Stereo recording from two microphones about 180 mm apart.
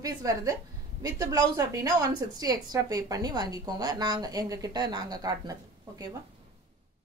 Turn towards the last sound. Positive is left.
turn(degrees=-20)  # may be behind; listen again after turning